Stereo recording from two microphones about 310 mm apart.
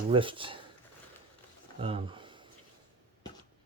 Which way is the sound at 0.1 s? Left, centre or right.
Centre.